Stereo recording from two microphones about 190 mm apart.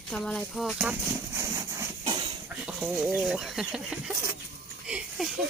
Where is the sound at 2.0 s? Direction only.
25° right (ahead or behind).